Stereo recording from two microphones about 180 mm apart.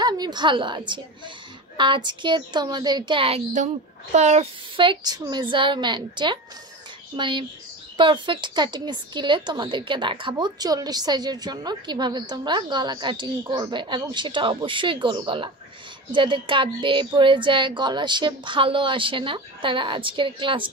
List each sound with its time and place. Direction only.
0.0 s a woman's voice: 25° right (ahead or behind)